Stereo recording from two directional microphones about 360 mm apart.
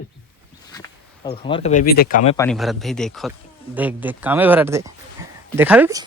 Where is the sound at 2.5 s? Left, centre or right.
Centre.